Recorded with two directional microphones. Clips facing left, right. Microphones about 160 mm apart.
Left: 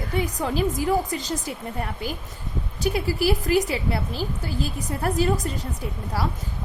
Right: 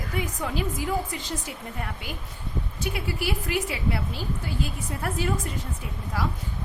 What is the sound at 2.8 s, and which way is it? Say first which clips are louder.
Speech: left 8 dB; 35° left (ahead or behind).